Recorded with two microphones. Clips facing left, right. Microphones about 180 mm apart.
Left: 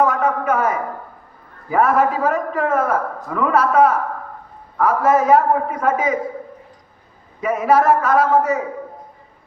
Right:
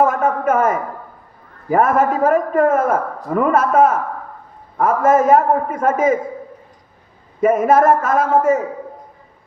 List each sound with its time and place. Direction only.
0.0 s a sound: 50° right (ahead or behind)
1.7 s a man's voice: 50° right (ahead or behind)
7.4 s a man's voice: 50° right (ahead or behind)